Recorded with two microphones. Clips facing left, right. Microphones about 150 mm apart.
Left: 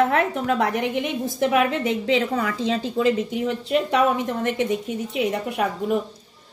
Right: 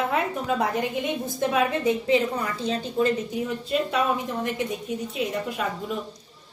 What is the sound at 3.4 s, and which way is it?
A woman's voice, 80° left.